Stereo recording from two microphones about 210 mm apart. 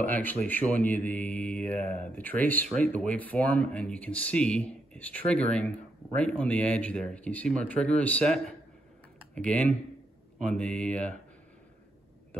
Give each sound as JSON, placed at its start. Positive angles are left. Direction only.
{"t": 0.0, "sound": "speech", "side_deg": 10}